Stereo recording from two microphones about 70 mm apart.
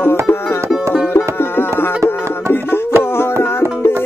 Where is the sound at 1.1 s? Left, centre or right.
Left.